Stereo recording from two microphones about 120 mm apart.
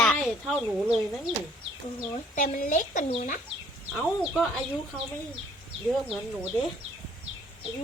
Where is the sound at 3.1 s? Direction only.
80° left.